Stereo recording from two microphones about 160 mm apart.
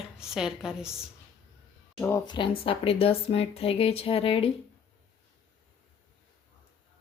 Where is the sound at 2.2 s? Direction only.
30° left (ahead or behind).